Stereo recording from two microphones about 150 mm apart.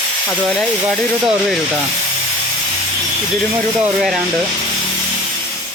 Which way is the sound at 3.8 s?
Centre (ahead or behind).